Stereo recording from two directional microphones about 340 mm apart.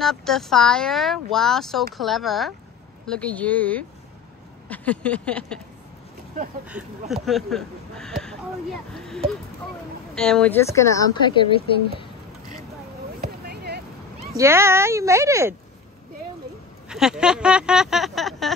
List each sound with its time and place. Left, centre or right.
0.0 s speech: centre
6.7 s speech: centre
10.1 s speech: centre
13.2 s a sound: right
14.3 s speech: centre
16.9 s speech: centre